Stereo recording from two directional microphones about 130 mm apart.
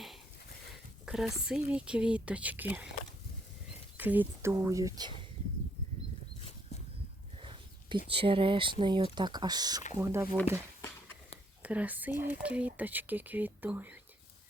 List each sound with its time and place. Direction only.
1.0 s speech: centre (ahead or behind)
3.9 s speech: 15° right (ahead or behind)
4.5 s speech: 25° right (ahead or behind)
7.3 s speech: 45° right (ahead or behind)
9.9 s speech: 20° right (ahead or behind)
11.6 s speech: 10° right (ahead or behind)